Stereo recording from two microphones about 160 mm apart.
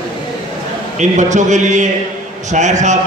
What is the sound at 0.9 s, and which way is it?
A man's voice, 50° right (ahead or behind).